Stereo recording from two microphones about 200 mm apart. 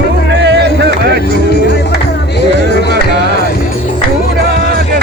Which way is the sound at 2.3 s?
55° left (ahead or behind).